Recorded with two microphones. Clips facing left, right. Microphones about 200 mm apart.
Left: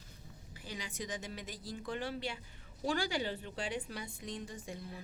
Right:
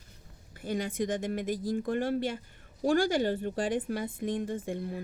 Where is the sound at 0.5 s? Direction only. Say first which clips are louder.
Right 13 dB; 55° right (ahead or behind).